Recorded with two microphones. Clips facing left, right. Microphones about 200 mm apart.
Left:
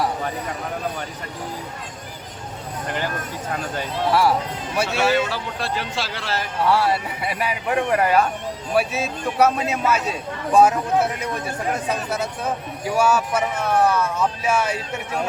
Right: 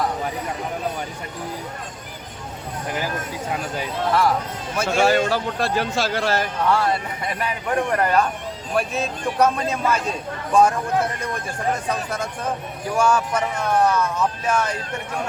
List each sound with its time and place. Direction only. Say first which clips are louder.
4.1 s speech: left 1 dB; 10° left (ahead or behind)
4.9 s a man's voice: right 4 dB; 45° right (ahead or behind)
6.7 s speech: left 2 dB; 5° left (ahead or behind)
11.2 s speech: left 1 dB; 5° left (ahead or behind)